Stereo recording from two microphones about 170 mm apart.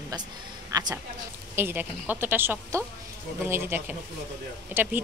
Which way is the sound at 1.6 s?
10° right (ahead or behind).